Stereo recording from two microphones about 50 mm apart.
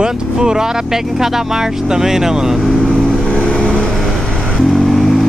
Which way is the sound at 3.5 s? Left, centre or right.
Left.